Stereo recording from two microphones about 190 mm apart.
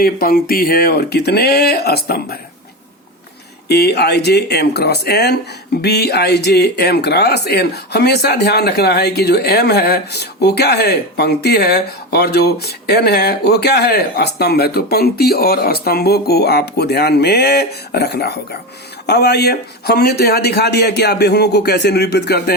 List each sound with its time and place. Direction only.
0.0 s speech: 50° left (ahead or behind)
3.7 s speech: 60° left (ahead or behind)